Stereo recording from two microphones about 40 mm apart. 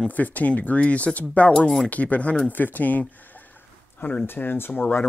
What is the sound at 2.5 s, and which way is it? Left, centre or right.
Speech, left.